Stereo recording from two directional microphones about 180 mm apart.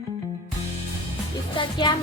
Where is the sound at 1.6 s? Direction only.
25° left (ahead or behind).